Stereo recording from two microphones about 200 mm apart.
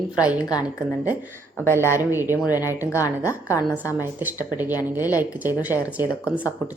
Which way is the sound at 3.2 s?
15° left (ahead or behind).